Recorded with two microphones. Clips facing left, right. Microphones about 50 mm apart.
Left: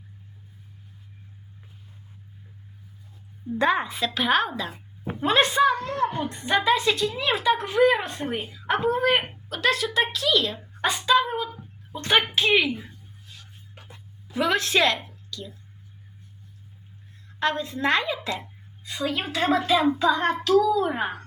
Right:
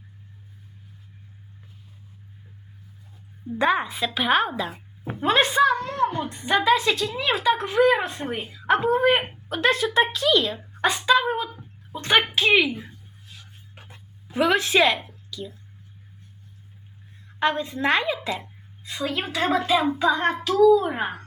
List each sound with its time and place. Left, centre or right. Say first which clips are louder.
3.6 s a woman's voice: right 1 dB; centre
9.0 s a woman's voice: right 2 dB; centre
10.5 s a woman's voice: right 3 dB; centre
13.8 s a sound: even; right
17.4 s a woman's voice: right 2 dB; centre